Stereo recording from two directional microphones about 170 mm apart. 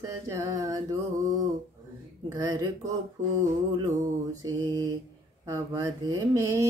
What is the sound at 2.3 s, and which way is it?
Speech, 20° right (ahead or behind).